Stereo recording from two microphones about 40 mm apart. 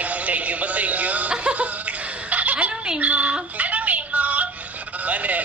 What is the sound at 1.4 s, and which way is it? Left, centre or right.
Laughter, right.